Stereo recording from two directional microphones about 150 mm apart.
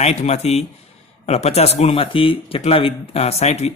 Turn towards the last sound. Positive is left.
turn(degrees=45)  # may be behind; listen again after turning